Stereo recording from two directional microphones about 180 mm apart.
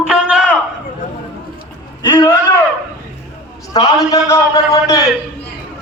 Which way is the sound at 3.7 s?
20° left (ahead or behind).